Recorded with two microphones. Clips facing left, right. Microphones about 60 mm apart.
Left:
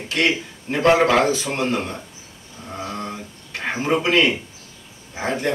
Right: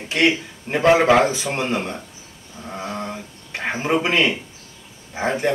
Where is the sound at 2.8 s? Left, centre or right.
Centre.